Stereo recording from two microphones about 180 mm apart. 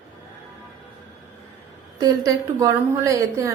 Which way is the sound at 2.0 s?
20° right (ahead or behind).